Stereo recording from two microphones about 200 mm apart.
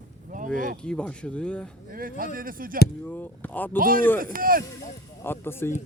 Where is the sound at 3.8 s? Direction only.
45° right (ahead or behind).